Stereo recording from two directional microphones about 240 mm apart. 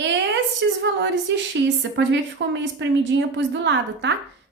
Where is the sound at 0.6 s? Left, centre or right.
Right.